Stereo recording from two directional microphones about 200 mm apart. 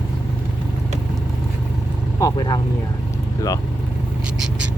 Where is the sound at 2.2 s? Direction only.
20° left (ahead or behind).